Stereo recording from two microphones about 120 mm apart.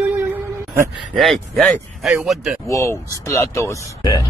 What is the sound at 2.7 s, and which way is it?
Speech, 25° left (ahead or behind).